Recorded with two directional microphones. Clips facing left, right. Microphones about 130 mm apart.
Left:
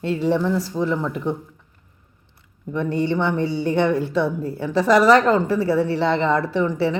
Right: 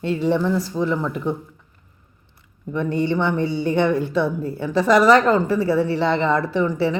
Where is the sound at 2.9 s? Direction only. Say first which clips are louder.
Even; 30° left (ahead or behind).